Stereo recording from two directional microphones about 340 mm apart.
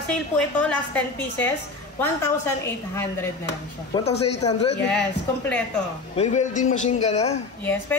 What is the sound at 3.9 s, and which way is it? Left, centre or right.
Speech, centre.